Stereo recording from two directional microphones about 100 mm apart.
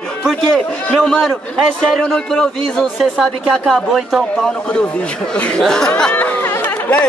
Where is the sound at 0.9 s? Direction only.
5° left (ahead or behind).